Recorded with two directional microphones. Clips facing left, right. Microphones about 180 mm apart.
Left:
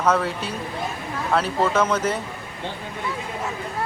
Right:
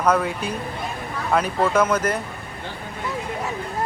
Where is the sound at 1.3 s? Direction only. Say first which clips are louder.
Right 1 dB; 10° right (ahead or behind).